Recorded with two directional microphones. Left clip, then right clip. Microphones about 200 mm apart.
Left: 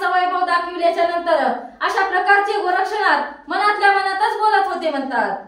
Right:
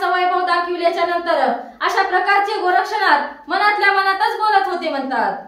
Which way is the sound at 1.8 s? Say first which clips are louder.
Right 1 dB; 20° right (ahead or behind).